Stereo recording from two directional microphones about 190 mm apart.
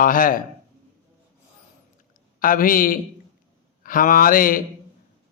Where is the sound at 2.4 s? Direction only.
45° left (ahead or behind).